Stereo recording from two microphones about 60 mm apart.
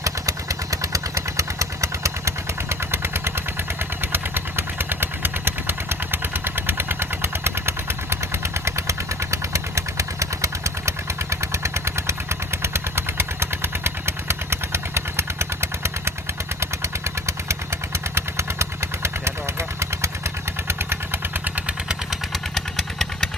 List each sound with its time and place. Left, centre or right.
0.0 s vehicle: right
21.4 s vehicle: right
22.3 s vehicle: centre